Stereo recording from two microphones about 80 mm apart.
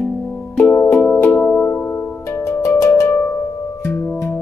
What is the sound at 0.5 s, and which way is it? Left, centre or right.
Music, left.